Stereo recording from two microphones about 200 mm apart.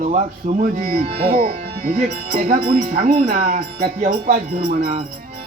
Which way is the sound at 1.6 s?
45° right (ahead or behind).